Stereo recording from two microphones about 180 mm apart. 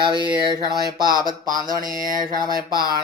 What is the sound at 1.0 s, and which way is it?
Speech, 50° right (ahead or behind).